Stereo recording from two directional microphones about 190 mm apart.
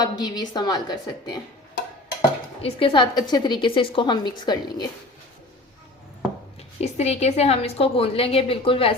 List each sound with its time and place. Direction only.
0.0 s a woman's voice: 20° left (ahead or behind)
2.6 s a woman's voice: 30° left (ahead or behind)
6.7 s a woman's voice: 35° left (ahead or behind)